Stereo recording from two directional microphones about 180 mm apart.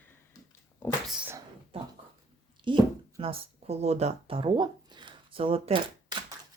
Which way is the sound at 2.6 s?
30° right (ahead or behind).